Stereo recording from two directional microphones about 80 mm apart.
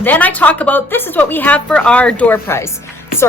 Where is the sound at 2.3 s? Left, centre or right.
Left.